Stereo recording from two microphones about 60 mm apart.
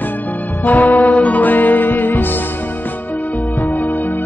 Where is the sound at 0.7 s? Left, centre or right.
Left.